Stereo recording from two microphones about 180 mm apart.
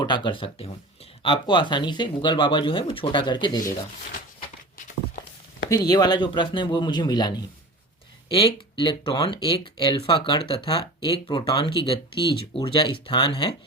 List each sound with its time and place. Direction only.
0.0 s speech: 25° left (ahead or behind)
5.6 s speech: 20° left (ahead or behind)